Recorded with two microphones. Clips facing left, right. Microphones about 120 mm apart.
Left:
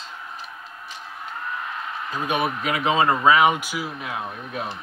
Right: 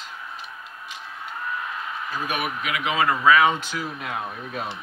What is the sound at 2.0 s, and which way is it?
Speech, 20° left (ahead or behind).